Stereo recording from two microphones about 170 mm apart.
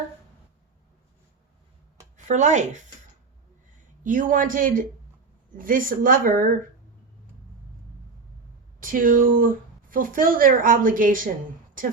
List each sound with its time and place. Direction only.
2.1 s speech: 45° right (ahead or behind)
4.0 s a woman's voice: 50° right (ahead or behind)
8.8 s a woman's voice: 55° right (ahead or behind)